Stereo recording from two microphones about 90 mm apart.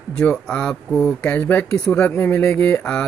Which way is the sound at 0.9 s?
Centre (ahead or behind).